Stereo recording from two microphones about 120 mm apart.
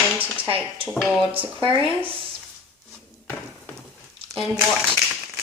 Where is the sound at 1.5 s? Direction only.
50° right (ahead or behind).